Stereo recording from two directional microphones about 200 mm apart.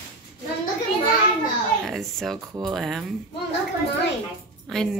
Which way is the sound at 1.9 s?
Centre (ahead or behind).